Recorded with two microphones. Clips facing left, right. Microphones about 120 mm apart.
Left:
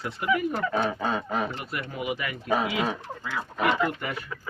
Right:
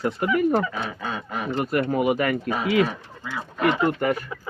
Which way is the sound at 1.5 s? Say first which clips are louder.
Right 12 dB; 45° right (ahead or behind).